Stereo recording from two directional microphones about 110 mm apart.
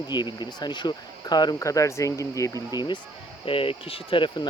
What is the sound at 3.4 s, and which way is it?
Speech, 55° left (ahead or behind).